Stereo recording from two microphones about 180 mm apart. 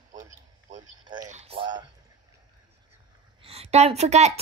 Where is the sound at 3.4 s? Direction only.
35° right (ahead or behind).